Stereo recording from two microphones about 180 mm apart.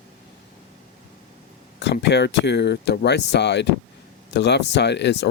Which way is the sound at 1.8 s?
75° left (ahead or behind).